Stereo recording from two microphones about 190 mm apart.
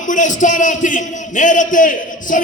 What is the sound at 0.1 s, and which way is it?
A man's voice, 40° left (ahead or behind).